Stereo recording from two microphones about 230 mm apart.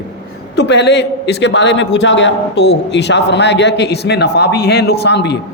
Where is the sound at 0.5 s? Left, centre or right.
Left.